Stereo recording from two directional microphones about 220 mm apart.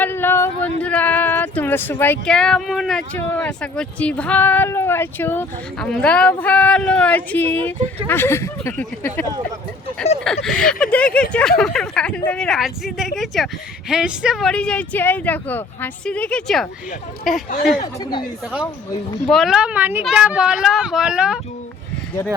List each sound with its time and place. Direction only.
0.0 s a sound: 10° left (ahead or behind)
0.8 s speech: 5° left (ahead or behind)
10.2 s speech: centre (ahead or behind)
17.8 s speech: 20° left (ahead or behind)
19.3 s speech: centre (ahead or behind)